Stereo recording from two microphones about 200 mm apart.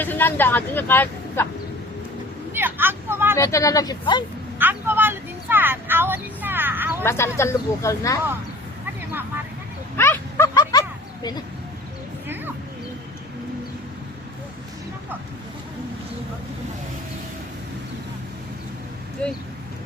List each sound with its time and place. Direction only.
0.0 s speech: 10° left (ahead or behind)
2.5 s vehicle: 10° right (ahead or behind)
3.3 s speech: 15° left (ahead or behind)
4.5 s speech: 10° right (ahead or behind)
7.0 s speech: 10° left (ahead or behind)
10.0 s a sound: 15° left (ahead or behind)